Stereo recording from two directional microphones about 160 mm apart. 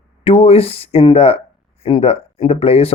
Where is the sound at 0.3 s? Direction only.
40° left (ahead or behind).